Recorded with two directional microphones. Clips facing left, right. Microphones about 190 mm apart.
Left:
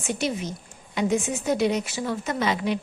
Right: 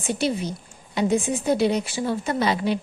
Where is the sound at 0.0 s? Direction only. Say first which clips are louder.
Right 3 dB; 30° right (ahead or behind).